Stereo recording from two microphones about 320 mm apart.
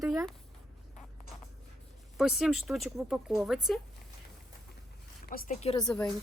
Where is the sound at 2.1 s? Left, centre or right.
Centre.